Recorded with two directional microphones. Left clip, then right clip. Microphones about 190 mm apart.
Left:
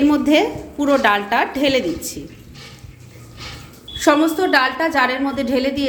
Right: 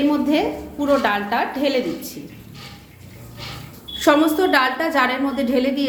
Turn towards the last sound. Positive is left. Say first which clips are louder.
# left 1 dB
turn(degrees=25)  # may be behind; listen again after turning